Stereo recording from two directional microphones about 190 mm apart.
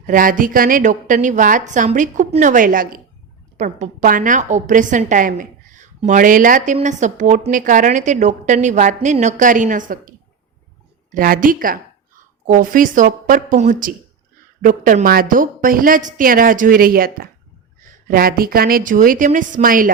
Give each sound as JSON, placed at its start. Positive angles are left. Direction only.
{"t": 0.0, "sound": "a woman's voice", "side_deg": -45}